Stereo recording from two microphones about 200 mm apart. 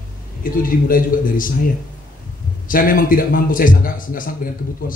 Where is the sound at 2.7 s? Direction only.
45° left (ahead or behind).